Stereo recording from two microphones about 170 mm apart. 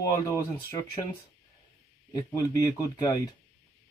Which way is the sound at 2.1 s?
20° left (ahead or behind).